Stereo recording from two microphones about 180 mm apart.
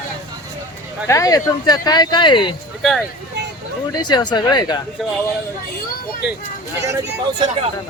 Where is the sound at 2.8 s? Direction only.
Centre (ahead or behind).